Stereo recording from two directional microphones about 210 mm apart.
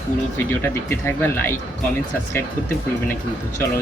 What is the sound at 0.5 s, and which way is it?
A man's voice, 10° left (ahead or behind).